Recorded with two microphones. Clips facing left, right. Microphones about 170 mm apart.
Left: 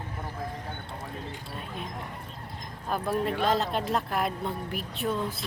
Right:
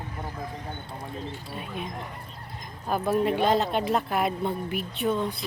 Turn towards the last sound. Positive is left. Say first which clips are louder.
# right 3 dB
turn(degrees=0)  # may be behind; listen again after turning